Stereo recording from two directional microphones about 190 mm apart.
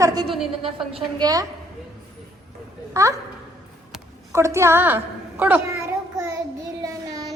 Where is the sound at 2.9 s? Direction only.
15° right (ahead or behind).